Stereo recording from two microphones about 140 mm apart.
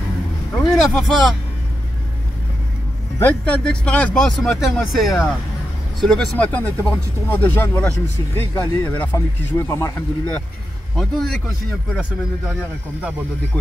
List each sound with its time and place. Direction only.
0.6 s speech: centre (ahead or behind)
3.2 s speech: 10° left (ahead or behind)
11.0 s speech: 5° left (ahead or behind)